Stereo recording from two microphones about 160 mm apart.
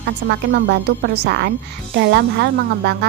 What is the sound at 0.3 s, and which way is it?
Speech, 90° right.